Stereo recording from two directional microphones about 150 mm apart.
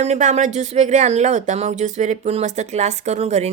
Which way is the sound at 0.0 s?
55° right (ahead or behind).